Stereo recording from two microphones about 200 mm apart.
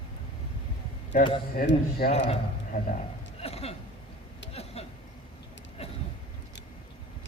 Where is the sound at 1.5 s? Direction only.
50° left (ahead or behind).